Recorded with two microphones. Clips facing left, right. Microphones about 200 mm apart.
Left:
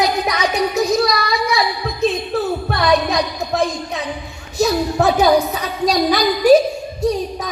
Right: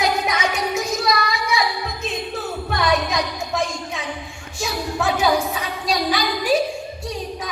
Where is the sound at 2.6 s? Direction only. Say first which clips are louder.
Left 1 dB; 35° left (ahead or behind).